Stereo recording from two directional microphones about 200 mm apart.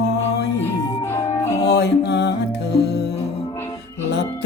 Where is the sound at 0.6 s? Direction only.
10° left (ahead or behind).